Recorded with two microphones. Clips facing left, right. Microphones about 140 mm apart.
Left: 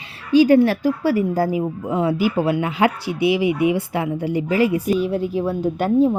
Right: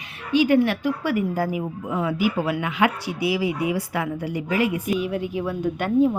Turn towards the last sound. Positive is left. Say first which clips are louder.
# left 3 dB
turn(degrees=30)  # may be behind; listen again after turning